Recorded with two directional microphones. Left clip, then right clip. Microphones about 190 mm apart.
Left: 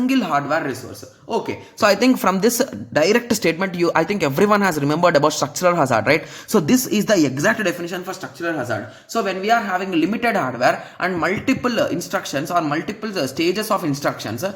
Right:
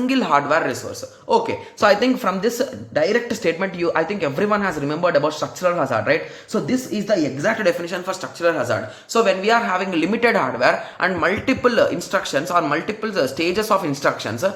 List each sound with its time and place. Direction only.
0.1 s speech: 15° left (ahead or behind)
1.8 s speech: 30° left (ahead or behind)
7.4 s speech: 20° left (ahead or behind)
8.4 s speech: centre (ahead or behind)
9.1 s speech: 15° left (ahead or behind)